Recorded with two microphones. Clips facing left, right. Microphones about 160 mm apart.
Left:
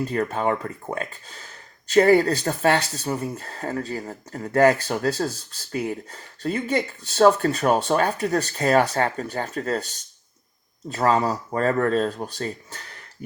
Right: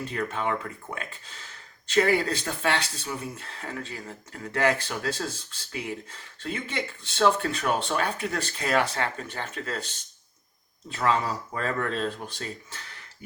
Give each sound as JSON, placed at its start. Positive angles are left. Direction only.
{"t": 0.0, "sound": "speech", "side_deg": 40}
{"t": 10.9, "sound": "speech", "side_deg": 40}